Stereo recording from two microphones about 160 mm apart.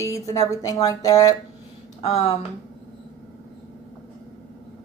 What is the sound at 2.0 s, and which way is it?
Speech, 40° left (ahead or behind).